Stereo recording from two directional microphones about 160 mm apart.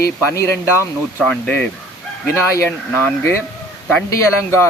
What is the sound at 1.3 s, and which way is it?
Speech, 5° left (ahead or behind).